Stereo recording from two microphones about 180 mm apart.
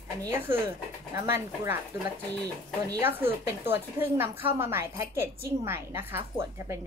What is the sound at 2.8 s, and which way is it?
A woman's voice, 15° right (ahead or behind).